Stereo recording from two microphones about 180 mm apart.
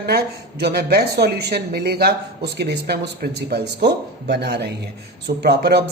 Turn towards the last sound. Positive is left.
turn(degrees=-65)  # may be behind; listen again after turning